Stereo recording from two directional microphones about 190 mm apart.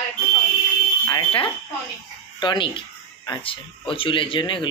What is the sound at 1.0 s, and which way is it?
Speech, 25° left (ahead or behind).